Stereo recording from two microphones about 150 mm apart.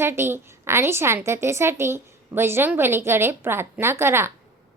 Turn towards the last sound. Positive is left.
turn(degrees=-15)  # may be behind; listen again after turning